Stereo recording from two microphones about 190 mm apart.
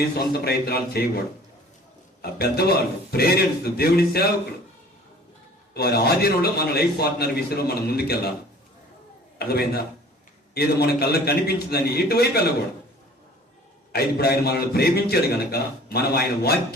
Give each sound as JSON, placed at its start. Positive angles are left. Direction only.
{"t": 0.2, "sound": "a man's voice", "side_deg": 55}
{"t": 2.2, "sound": "a man's voice", "side_deg": 55}
{"t": 5.7, "sound": "a man's voice", "side_deg": 55}
{"t": 9.4, "sound": "a man's voice", "side_deg": 55}
{"t": 13.9, "sound": "a man's voice", "side_deg": 55}